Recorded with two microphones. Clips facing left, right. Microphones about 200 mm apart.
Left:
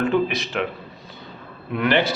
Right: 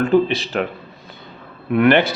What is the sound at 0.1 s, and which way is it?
Speech, 30° right (ahead or behind).